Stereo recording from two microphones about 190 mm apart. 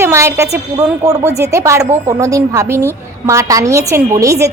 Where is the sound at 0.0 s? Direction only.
15° right (ahead or behind).